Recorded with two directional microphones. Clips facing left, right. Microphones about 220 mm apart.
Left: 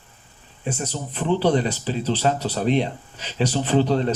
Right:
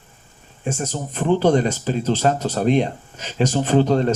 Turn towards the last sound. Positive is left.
turn(degrees=-45)  # may be behind; listen again after turning